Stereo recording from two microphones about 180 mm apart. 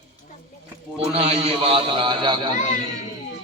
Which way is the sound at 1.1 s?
35° right (ahead or behind).